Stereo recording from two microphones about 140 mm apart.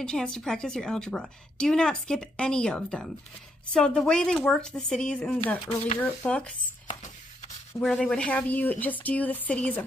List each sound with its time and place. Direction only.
0.0 s a woman's voice: 5° left (ahead or behind)
6.9 s a sound: 55° left (ahead or behind)
7.8 s speech: 5° left (ahead or behind)